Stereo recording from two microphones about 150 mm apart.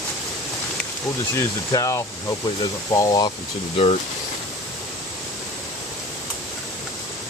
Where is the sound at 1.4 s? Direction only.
20° left (ahead or behind).